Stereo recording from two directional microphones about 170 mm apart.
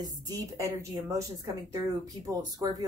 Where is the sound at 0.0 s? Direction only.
20° right (ahead or behind).